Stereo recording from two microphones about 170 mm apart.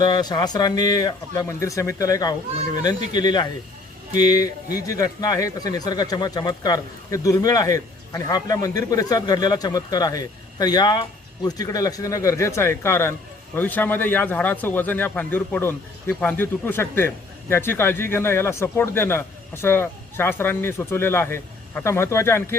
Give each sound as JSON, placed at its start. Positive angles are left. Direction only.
{"t": 0.0, "sound": "a man's voice", "side_deg": 25}